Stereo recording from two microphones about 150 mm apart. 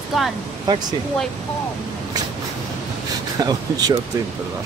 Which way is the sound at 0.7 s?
25° right (ahead or behind).